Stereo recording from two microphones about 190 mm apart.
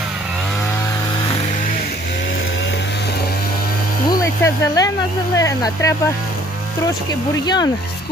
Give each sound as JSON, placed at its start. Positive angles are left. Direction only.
{"t": 4.1, "sound": "snake", "side_deg": 15}
{"t": 5.4, "sound": "speech", "side_deg": 15}
{"t": 7.1, "sound": "speech", "side_deg": 20}